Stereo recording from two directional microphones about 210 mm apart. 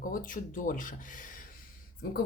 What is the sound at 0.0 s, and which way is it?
Speech, 40° left (ahead or behind).